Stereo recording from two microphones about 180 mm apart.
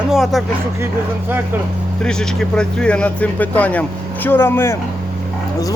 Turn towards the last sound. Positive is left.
turn(degrees=15)  # may be behind; listen again after turning